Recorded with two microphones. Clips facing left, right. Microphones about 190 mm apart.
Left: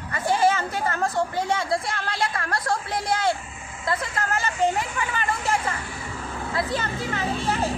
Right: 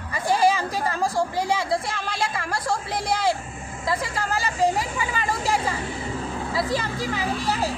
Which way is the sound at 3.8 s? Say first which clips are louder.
Right 1 dB; 5° right (ahead or behind).